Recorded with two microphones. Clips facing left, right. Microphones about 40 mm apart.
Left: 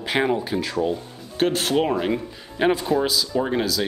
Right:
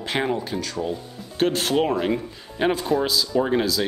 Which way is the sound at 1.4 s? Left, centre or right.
Centre.